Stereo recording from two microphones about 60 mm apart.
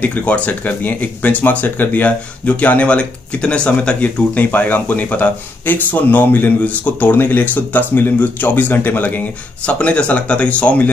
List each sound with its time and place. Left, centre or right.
0.0 s speech: left
9.7 s speech: centre